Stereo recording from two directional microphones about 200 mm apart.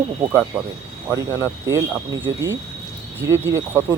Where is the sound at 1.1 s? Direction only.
15° right (ahead or behind).